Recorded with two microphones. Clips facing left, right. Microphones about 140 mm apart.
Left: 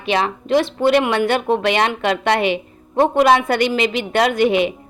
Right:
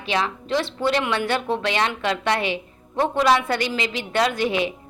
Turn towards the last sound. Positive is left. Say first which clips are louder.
# left 6 dB
turn(degrees=60)  # may be behind; listen again after turning